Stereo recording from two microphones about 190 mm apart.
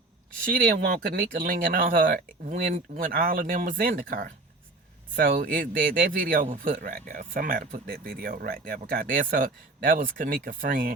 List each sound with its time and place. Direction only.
0.4 s a man's voice: 50° right (ahead or behind)